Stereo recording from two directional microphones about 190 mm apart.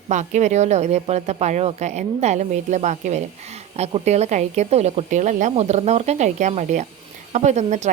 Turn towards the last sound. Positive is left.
turn(degrees=-40)  # may be behind; listen again after turning